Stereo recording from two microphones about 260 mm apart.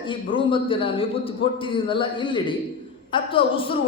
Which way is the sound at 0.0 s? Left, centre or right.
Centre.